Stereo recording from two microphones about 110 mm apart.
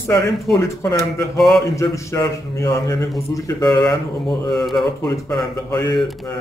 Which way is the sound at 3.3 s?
35° left (ahead or behind).